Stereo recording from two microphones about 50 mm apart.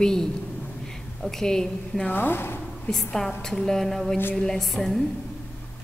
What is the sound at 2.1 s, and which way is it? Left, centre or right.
Speech, left.